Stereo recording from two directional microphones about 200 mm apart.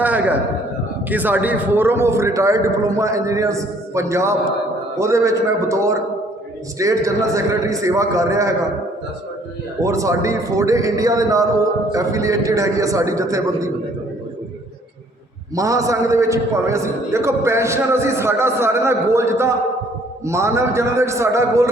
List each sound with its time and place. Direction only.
0.0 s a sound: 10° right (ahead or behind)
1.1 s a man's voice: 10° right (ahead or behind)
9.8 s a man's voice: 15° right (ahead or behind)
15.5 s a man's voice: 15° right (ahead or behind)